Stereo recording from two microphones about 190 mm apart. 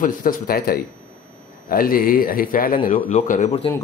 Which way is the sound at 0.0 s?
45° left (ahead or behind).